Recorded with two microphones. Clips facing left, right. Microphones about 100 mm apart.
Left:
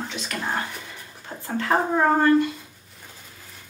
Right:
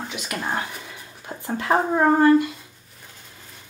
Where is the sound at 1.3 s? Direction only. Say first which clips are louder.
Right 2 dB; 20° right (ahead or behind).